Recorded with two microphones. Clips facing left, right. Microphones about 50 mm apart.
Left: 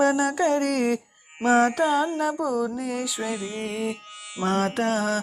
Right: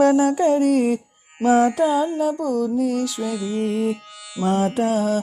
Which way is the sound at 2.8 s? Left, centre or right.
Centre.